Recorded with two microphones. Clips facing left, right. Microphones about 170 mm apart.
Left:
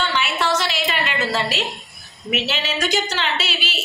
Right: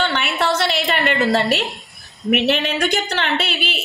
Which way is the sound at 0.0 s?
60° right (ahead or behind).